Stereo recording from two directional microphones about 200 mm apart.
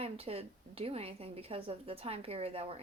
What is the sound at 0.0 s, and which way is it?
A woman's voice, 30° right (ahead or behind).